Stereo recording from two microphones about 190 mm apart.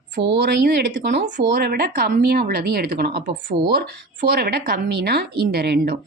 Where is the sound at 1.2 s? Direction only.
50° right (ahead or behind).